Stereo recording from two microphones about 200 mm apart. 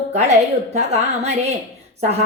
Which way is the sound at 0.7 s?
35° right (ahead or behind).